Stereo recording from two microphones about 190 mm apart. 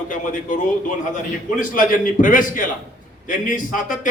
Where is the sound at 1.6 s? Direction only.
45° left (ahead or behind).